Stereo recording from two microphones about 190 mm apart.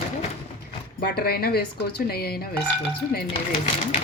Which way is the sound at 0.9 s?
55° left (ahead or behind).